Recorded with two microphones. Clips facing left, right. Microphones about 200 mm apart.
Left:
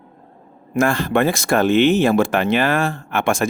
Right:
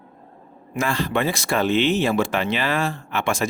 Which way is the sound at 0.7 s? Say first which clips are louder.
Left 6 dB; 50° left (ahead or behind).